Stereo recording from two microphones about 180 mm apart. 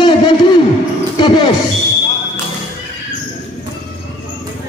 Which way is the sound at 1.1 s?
25° left (ahead or behind).